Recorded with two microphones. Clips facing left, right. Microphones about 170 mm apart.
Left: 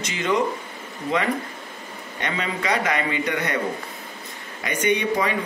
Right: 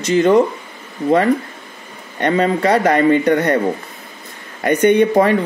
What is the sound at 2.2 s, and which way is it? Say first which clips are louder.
Speech: right 12 dB; 45° right (ahead or behind).